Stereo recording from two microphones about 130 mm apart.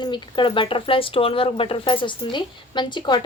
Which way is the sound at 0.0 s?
40° left (ahead or behind).